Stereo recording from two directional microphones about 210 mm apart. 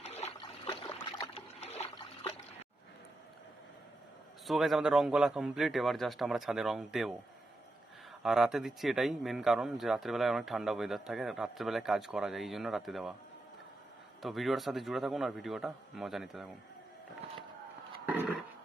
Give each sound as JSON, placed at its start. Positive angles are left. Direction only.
{"t": 0.0, "sound": "trickle", "side_deg": 30}
{"t": 4.4, "sound": "speech", "side_deg": 0}
{"t": 8.2, "sound": "speech", "side_deg": 0}
{"t": 14.2, "sound": "speech", "side_deg": 0}
{"t": 18.1, "sound": "a sound", "side_deg": -5}